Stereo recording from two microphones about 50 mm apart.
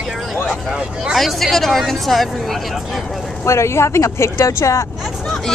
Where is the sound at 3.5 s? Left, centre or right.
Left.